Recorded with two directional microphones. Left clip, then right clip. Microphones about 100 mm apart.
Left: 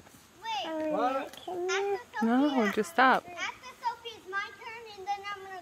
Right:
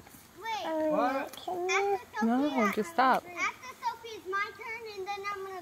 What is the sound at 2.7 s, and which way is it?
Speech, 50° left (ahead or behind).